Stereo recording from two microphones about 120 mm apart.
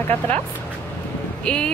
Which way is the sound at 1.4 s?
5° left (ahead or behind).